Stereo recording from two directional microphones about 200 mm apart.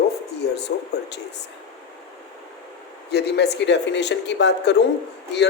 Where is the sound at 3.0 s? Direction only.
55° left (ahead or behind).